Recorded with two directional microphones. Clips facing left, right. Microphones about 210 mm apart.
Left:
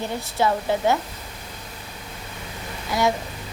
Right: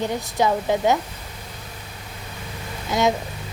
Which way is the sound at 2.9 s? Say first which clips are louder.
Right 2 dB; 20° right (ahead or behind).